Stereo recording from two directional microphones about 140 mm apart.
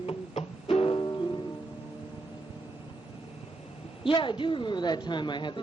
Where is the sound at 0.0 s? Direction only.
45° left (ahead or behind).